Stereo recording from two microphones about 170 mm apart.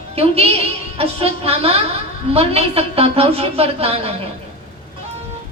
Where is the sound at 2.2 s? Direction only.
35° right (ahead or behind).